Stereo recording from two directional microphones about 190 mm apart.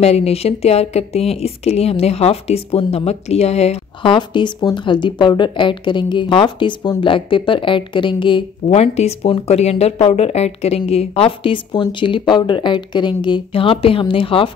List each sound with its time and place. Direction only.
0.0 s speech: 35° left (ahead or behind)